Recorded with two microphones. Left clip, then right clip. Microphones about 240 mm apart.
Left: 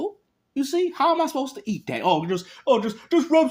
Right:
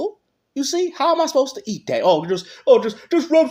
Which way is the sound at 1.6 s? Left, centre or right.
Centre.